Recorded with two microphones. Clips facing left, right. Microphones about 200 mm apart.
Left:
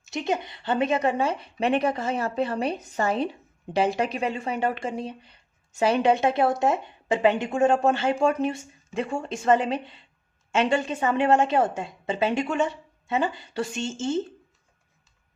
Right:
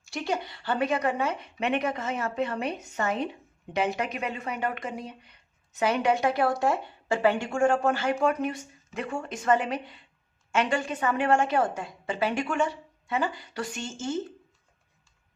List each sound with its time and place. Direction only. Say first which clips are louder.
0.0 s a woman's voice: left 3 dB; 20° left (ahead or behind)